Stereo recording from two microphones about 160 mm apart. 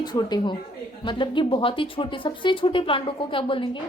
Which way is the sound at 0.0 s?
25° left (ahead or behind).